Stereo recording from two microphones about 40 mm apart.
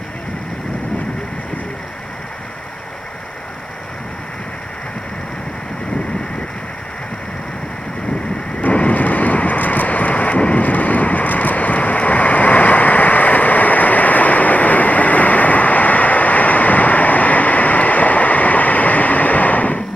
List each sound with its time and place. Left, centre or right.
8.5 s thunder: left
10.6 s vehicle: left